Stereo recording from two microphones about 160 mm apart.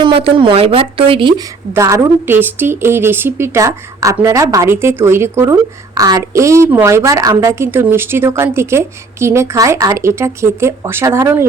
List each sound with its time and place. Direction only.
0.0 s speech: 35° right (ahead or behind)
1.7 s a woman's voice: 15° right (ahead or behind)